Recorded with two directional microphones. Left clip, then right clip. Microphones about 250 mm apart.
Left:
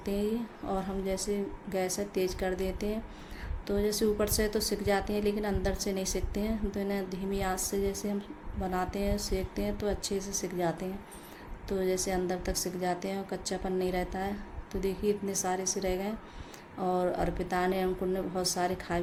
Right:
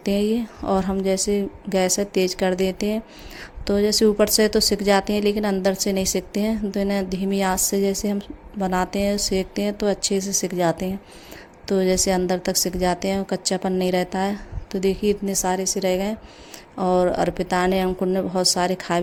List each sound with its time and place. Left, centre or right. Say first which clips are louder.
0.0 s a woman's voice: right 10 dB; right